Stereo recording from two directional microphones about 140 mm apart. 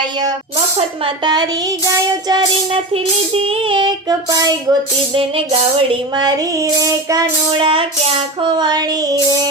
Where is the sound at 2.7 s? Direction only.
45° right (ahead or behind); by 4.7 s 25° right (ahead or behind).